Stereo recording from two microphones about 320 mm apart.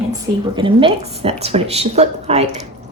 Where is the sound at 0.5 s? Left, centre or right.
Centre.